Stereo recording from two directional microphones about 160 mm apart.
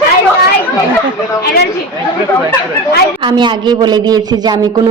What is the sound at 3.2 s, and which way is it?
Speech, 30° right (ahead or behind).